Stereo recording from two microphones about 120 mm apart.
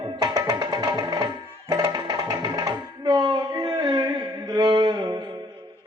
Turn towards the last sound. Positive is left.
turn(degrees=-35)  # may be behind; listen again after turning